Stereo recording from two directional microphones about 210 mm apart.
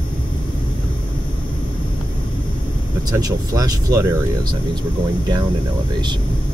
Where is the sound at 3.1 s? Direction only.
20° right (ahead or behind).